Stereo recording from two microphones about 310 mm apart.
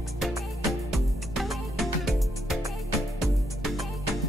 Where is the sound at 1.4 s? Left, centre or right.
Centre.